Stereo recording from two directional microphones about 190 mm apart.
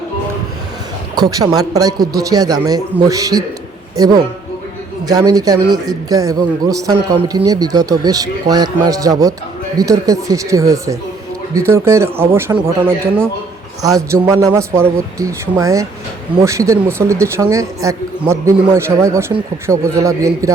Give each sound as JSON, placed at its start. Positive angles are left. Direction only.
{"t": 1.1, "sound": "a man's voice", "side_deg": -20}